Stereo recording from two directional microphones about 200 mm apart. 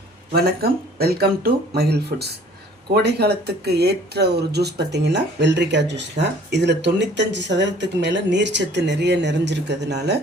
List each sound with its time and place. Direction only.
0.3 s speech: 50° right (ahead or behind)